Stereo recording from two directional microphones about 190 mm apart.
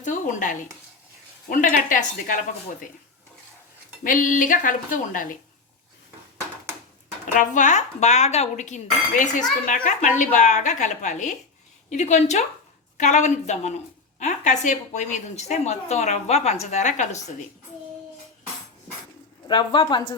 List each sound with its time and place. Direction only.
0.0 s a woman's voice: 40° left (ahead or behind)
4.0 s a woman's voice: 45° left (ahead or behind)
7.3 s a woman's voice: 40° left (ahead or behind)
19.5 s speech: 25° left (ahead or behind)